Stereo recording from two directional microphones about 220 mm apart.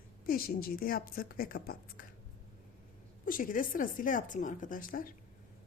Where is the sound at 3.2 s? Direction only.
40° left (ahead or behind).